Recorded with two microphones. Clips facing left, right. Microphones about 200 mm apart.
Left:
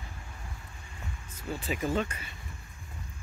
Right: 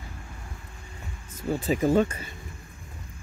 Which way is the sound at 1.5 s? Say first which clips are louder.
Right 8 dB; 40° right (ahead or behind).